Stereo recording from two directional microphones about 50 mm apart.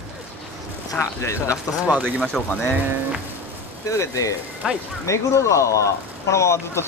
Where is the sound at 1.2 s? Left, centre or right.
Left.